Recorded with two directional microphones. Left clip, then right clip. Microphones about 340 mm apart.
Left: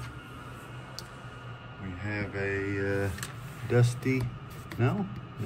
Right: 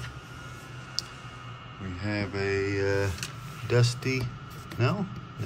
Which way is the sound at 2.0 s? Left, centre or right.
Centre.